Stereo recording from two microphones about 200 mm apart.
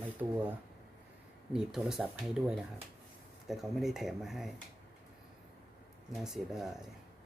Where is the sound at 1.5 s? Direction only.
Centre (ahead or behind).